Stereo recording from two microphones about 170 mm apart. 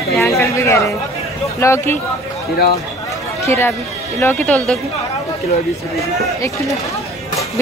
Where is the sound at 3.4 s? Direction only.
15° left (ahead or behind).